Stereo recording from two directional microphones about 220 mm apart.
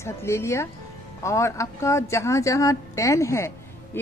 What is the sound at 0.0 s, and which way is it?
A woman's voice, 10° left (ahead or behind).